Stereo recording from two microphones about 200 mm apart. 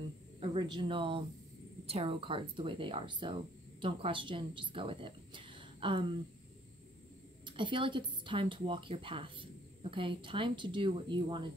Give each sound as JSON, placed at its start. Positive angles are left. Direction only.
{"t": 0.4, "sound": "a woman's voice", "side_deg": -25}
{"t": 7.4, "sound": "speech", "side_deg": -25}